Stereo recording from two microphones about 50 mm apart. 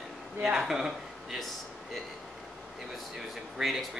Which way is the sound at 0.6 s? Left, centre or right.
Centre.